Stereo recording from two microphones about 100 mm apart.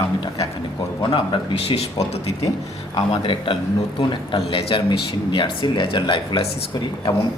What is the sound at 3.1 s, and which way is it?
Speech, 60° left (ahead or behind).